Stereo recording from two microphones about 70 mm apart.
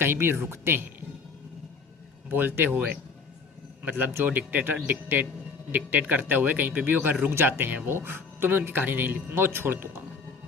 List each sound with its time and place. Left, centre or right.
0.0 s speech: right
2.3 s speech: right
3.8 s speech: right